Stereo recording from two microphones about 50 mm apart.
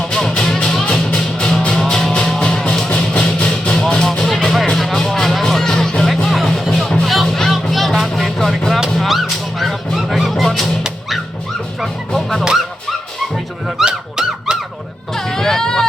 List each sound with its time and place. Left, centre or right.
0.1 s music: centre
6.1 s music: centre
9.0 s honk: centre
11.8 s honk: centre
13.8 s squeak: centre
15.1 s a sound: centre